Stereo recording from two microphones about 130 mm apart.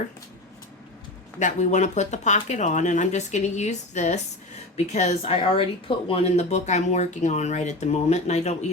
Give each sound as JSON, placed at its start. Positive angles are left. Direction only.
{"t": 1.4, "sound": "a woman's voice", "side_deg": 70}